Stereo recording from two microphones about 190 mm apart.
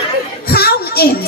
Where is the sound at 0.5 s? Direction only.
55° left (ahead or behind).